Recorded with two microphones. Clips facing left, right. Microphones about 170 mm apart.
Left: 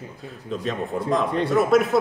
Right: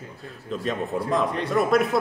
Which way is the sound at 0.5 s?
Centre (ahead or behind).